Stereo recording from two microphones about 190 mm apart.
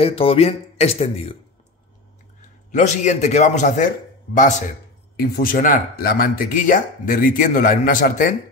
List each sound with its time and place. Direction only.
0.0 s a man's voice: 30° left (ahead or behind)
2.7 s a man's voice: 40° left (ahead or behind)
5.1 s speech: 55° left (ahead or behind)